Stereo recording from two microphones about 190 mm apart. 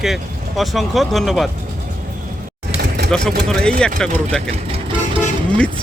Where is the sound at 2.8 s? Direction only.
55° right (ahead or behind).